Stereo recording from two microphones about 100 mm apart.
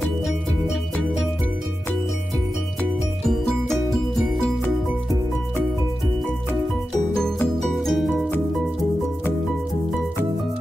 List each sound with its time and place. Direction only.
7.4 s music: centre (ahead or behind)